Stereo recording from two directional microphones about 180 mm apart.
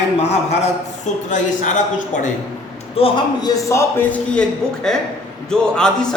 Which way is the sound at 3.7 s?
15° left (ahead or behind).